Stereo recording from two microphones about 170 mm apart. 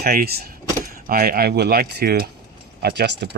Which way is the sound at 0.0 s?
65° right (ahead or behind).